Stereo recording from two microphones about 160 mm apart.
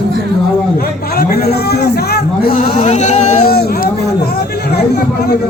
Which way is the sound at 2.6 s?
45° left (ahead or behind).